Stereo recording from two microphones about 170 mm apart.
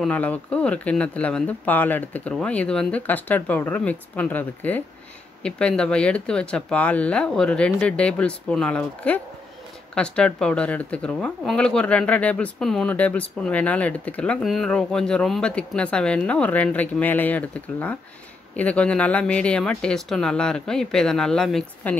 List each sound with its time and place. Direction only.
0.0 s speech: 10° left (ahead or behind)